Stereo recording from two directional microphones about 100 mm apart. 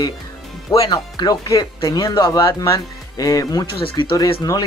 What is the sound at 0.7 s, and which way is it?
Speech, 35° left (ahead or behind).